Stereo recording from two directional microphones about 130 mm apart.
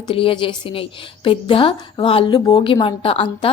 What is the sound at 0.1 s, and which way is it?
A woman's voice, 40° left (ahead or behind).